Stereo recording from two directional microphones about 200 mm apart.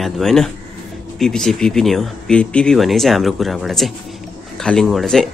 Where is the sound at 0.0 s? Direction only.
Centre (ahead or behind).